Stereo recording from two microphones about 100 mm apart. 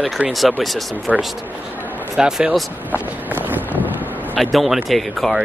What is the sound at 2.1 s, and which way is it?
Speech, 5° right (ahead or behind).